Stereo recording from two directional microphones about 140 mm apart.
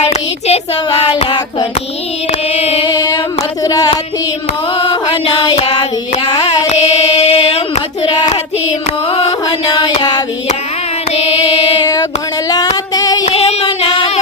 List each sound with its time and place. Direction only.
0.0 s child singing: 50° left (ahead or behind)
2.6 s female singing: 40° left (ahead or behind)
3.6 s a sound: 25° left (ahead or behind)
4.9 s music: 35° left (ahead or behind)
6.2 s carnatic music: 25° left (ahead or behind)
6.7 s female singing: 50° left (ahead or behind)
9.5 s a sound: 35° left (ahead or behind)
10.0 s hands: 30° left (ahead or behind)
12.5 s female singing: 30° left (ahead or behind)
13.8 s music: 30° left (ahead or behind)